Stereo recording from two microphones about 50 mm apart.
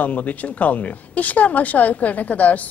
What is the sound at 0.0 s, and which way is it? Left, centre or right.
A woman's voice, left.